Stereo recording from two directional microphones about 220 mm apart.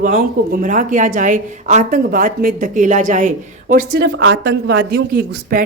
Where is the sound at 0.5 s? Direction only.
35° right (ahead or behind).